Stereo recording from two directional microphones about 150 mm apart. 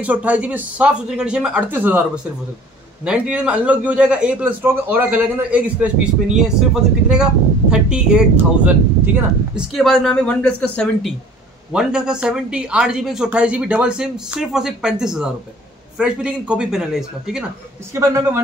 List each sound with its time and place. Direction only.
0.0 s a man's voice: 10° right (ahead or behind)
17.9 s speech: 20° right (ahead or behind)